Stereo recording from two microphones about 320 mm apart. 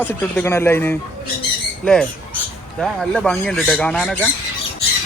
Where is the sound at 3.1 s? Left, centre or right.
Centre.